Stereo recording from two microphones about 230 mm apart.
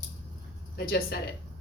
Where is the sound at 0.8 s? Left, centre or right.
Left.